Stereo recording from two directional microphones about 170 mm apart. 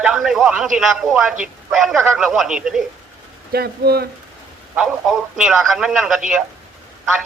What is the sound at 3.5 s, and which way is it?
Speech, 65° right (ahead or behind).